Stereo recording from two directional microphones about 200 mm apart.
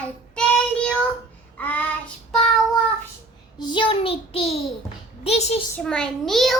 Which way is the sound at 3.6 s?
25° left (ahead or behind).